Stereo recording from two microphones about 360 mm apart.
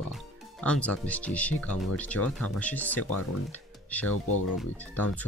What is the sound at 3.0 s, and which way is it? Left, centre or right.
Speech, left.